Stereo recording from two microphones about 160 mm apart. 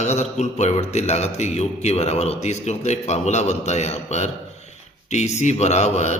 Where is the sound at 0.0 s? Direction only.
45° left (ahead or behind).